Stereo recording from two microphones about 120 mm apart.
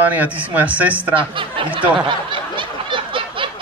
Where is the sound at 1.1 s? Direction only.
45° right (ahead or behind).